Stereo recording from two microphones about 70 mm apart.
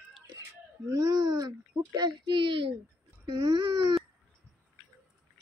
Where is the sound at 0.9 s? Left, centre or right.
Right.